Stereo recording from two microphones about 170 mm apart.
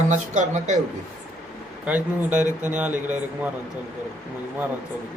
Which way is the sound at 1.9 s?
10° right (ahead or behind).